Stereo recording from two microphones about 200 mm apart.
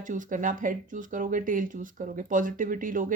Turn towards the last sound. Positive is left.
turn(degrees=-40)  # may be behind; listen again after turning